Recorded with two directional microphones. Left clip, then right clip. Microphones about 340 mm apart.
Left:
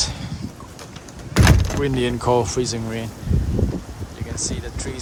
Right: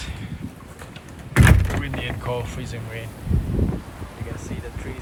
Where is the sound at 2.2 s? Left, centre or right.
Centre.